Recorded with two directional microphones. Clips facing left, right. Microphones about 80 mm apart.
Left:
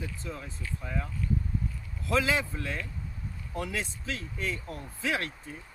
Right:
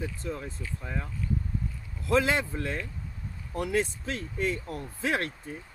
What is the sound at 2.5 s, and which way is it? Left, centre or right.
Speech, right.